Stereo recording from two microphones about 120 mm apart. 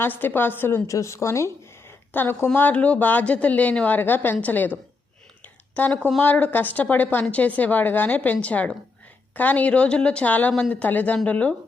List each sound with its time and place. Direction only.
0.0 s a woman's voice: 15° left (ahead or behind)
5.7 s a woman's voice: 15° left (ahead or behind)